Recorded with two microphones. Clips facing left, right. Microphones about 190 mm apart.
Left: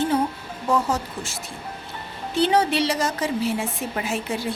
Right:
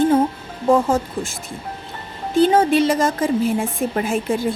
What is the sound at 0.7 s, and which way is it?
Speech, 50° right (ahead or behind).